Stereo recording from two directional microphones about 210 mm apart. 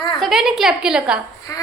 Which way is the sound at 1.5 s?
15° left (ahead or behind).